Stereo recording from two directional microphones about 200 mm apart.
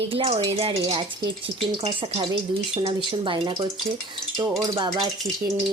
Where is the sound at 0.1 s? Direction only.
30° right (ahead or behind).